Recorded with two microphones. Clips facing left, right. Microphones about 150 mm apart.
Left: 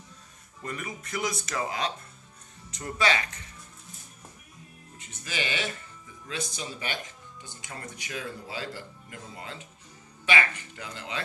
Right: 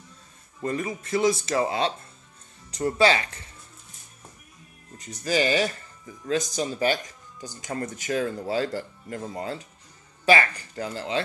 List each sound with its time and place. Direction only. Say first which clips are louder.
0.6 s speech: right 8 dB; 30° right (ahead or behind)
4.9 s speech: right 11 dB; 40° right (ahead or behind)